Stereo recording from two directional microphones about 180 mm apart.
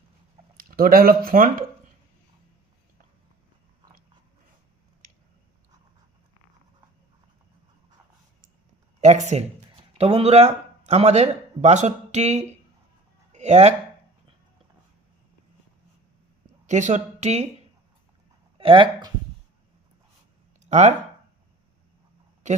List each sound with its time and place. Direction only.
0.5 s speech: 55° right (ahead or behind)
9.0 s speech: 40° right (ahead or behind)
16.6 s speech: 40° right (ahead or behind)
18.5 s speech: 30° right (ahead or behind)
20.7 s speech: 40° right (ahead or behind)
22.4 s speech: 40° right (ahead or behind)